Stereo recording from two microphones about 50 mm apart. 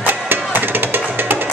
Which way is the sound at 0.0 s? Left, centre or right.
Right.